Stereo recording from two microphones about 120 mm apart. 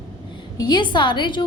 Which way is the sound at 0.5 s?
35° left (ahead or behind).